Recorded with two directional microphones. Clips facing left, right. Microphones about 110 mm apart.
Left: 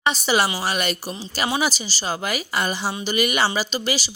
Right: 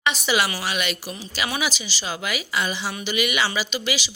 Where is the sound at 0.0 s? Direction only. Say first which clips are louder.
Left 2 dB; 35° left (ahead or behind).